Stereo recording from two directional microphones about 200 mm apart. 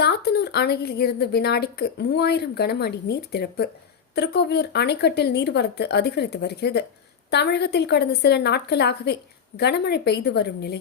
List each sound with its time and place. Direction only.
0.0 s a woman's voice: 55° left (ahead or behind)